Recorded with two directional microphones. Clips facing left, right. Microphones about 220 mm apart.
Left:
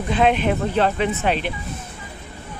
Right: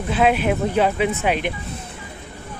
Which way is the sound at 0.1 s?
5° right (ahead or behind).